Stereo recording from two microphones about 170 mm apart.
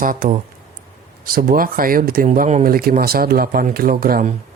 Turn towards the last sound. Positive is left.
turn(degrees=-60)  # may be behind; listen again after turning